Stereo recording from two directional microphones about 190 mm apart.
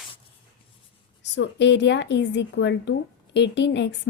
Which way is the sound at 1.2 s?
65° left (ahead or behind).